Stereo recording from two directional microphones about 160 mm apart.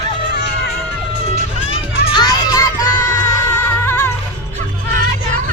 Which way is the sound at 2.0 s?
25° left (ahead or behind).